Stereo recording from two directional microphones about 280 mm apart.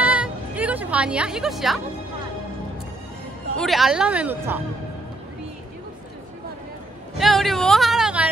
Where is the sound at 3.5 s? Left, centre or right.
Centre.